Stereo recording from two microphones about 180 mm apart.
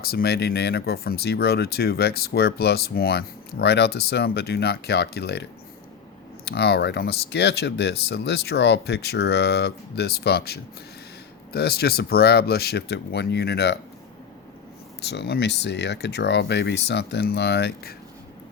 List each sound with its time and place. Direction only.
0.0 s speech: 60° left (ahead or behind)
15.0 s speech: 70° left (ahead or behind)